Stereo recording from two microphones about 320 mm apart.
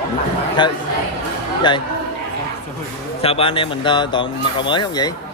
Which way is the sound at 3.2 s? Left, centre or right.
Centre.